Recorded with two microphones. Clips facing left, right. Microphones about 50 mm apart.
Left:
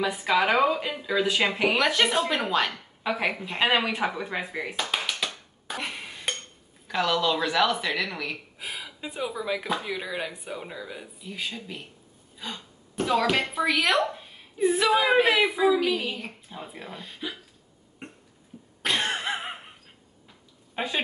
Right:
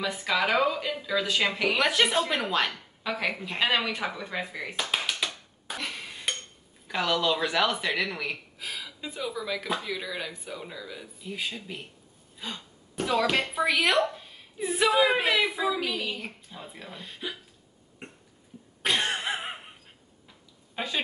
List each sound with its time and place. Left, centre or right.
0.0 s speech: centre
1.8 s speech: centre
3.1 s speech: centre
4.7 s a sound: centre
5.8 s a sound: centre
6.9 s speech: centre
8.5 s a woman's voice: left
11.2 s a woman's voice: centre
15.2 s speech: left
15.5 s speech: centre
17.0 s speech: centre
18.8 s a sound: centre
20.7 s a woman's voice: centre